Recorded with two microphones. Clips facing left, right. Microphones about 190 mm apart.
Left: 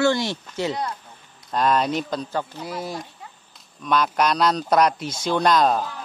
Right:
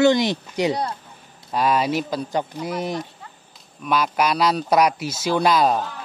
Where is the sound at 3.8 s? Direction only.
5° right (ahead or behind).